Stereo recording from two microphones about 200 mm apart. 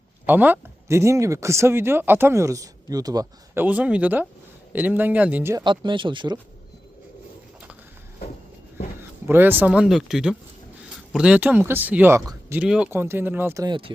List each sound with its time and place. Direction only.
0.3 s speech: 10° right (ahead or behind)
5.8 s speech: 25° right (ahead or behind)
9.0 s speech: 10° right (ahead or behind)